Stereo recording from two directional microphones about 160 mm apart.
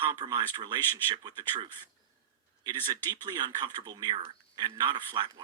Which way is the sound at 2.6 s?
25° right (ahead or behind).